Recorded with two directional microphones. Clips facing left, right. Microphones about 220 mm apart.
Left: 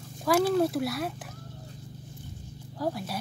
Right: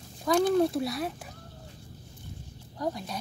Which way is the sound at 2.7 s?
5° left (ahead or behind).